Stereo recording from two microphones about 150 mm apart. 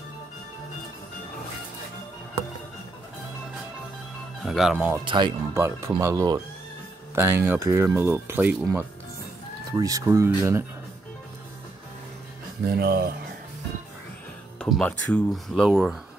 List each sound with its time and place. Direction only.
4.5 s speech: 5° right (ahead or behind)
5.0 s speech: 30° right (ahead or behind)
5.5 s speech: 20° right (ahead or behind)
12.6 s speech: 90° right
14.6 s speech: 5° left (ahead or behind)